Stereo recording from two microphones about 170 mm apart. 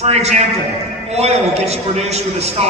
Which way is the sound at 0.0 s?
40° right (ahead or behind).